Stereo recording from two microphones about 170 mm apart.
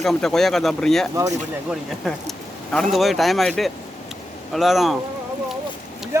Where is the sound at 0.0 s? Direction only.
5° left (ahead or behind).